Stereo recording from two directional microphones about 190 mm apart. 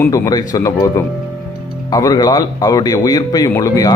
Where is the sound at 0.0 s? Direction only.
20° left (ahead or behind).